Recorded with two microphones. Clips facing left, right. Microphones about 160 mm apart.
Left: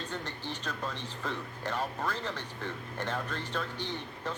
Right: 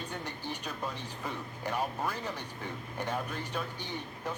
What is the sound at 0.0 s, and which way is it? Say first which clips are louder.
Speech: left 1 dB; 10° right (ahead or behind).